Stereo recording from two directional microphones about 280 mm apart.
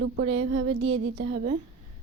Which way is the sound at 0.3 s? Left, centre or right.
Right.